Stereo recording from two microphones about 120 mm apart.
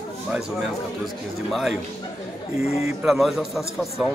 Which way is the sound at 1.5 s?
Centre (ahead or behind).